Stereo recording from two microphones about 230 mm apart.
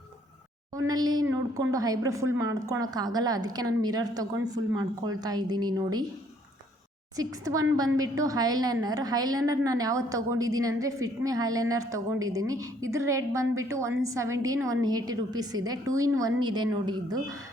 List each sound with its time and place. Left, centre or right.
0.7 s a woman's voice: centre
7.2 s a woman's voice: centre